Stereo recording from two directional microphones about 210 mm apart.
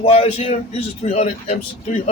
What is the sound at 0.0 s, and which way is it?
A man's voice, 30° left (ahead or behind).